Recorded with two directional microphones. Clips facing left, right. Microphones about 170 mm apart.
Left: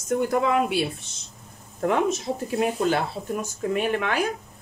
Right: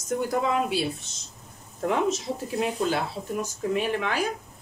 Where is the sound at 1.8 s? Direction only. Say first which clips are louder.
Left 2 dB; 55° left (ahead or behind).